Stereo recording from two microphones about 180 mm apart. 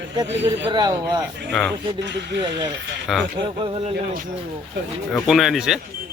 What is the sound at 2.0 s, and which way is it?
Speech, 75° right (ahead or behind).